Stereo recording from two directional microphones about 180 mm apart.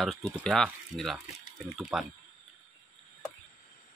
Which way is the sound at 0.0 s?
Centre (ahead or behind).